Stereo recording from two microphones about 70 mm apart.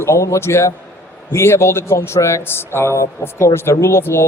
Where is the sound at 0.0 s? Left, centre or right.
Left.